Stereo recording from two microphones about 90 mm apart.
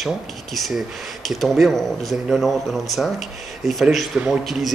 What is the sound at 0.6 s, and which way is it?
Speech, centre (ahead or behind).